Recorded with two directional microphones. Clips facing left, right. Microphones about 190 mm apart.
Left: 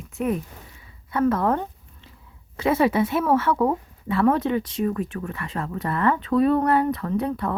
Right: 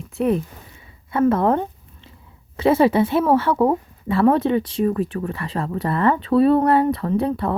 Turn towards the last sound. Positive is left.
turn(degrees=-30)  # may be behind; listen again after turning